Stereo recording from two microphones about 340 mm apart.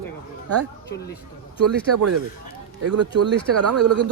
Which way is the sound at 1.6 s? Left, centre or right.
Right.